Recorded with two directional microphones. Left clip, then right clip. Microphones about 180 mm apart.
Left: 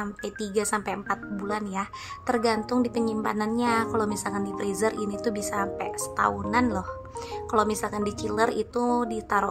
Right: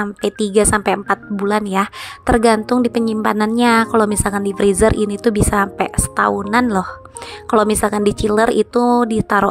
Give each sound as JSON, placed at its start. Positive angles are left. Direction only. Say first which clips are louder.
{"t": 0.0, "sound": "speech", "louder": "right 13 dB", "side_deg": -40}